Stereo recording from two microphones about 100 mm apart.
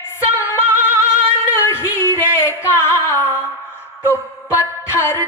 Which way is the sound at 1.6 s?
25° left (ahead or behind).